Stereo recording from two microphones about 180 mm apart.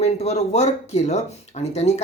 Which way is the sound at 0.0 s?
35° left (ahead or behind).